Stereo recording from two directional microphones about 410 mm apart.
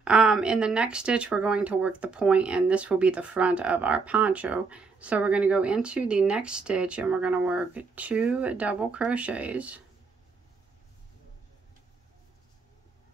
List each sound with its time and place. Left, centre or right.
0.0 s speech: centre